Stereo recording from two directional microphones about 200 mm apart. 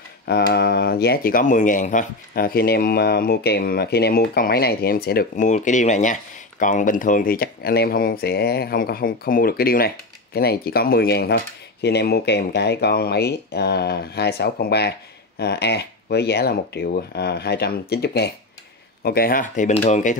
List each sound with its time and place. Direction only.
0.3 s speech: 55° left (ahead or behind); by 20.2 s 40° left (ahead or behind)